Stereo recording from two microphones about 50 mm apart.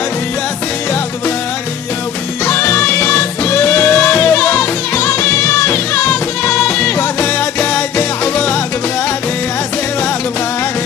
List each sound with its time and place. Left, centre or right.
2.4 s music: left
6.5 s music: left